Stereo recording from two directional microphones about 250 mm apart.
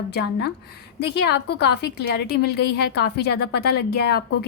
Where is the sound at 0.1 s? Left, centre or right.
Left.